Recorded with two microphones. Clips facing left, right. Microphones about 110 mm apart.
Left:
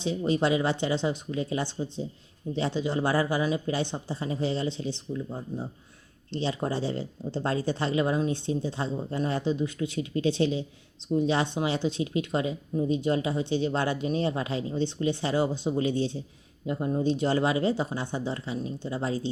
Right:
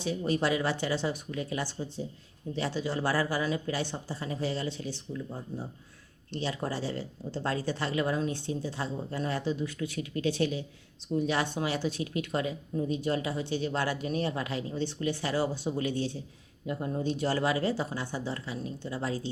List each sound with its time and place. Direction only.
0.0 s speech: 20° left (ahead or behind)